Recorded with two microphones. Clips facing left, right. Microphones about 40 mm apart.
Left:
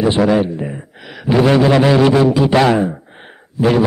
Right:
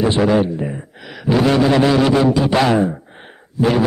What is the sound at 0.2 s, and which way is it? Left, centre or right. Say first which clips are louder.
A man's voice: left 1 dB; centre.